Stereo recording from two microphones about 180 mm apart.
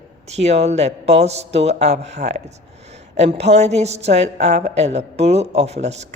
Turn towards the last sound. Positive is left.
turn(degrees=-40)  # may be behind; listen again after turning